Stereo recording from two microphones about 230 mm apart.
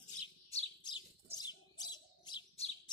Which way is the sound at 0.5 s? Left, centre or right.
Centre.